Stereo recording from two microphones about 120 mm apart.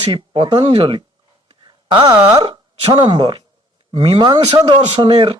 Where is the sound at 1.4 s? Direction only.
40° right (ahead or behind).